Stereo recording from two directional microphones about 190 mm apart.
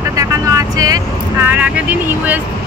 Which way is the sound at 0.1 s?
15° right (ahead or behind).